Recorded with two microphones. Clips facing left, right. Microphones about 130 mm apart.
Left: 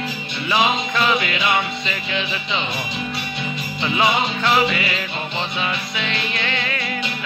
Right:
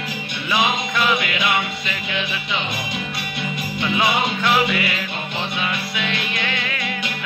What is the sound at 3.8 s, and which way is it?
Music, centre (ahead or behind).